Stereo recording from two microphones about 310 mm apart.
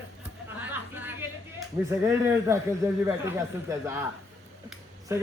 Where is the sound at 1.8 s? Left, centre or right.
Centre.